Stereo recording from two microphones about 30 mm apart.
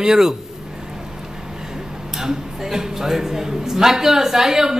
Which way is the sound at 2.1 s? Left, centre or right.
Centre.